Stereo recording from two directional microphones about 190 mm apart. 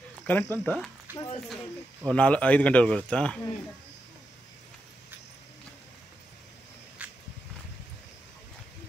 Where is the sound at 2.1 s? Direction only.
5° left (ahead or behind).